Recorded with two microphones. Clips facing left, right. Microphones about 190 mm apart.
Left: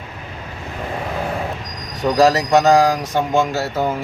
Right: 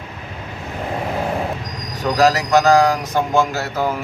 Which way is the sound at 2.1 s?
25° left (ahead or behind).